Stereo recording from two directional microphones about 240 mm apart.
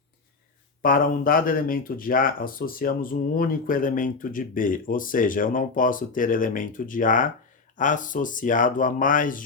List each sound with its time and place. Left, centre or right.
0.8 s speech: left